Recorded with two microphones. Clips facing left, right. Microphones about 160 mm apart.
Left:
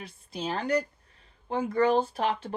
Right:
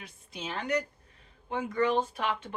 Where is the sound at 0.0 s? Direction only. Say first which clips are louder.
Left 6 dB; 35° left (ahead or behind).